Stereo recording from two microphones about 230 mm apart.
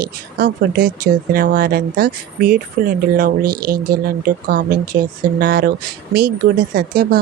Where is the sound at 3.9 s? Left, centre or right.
Right.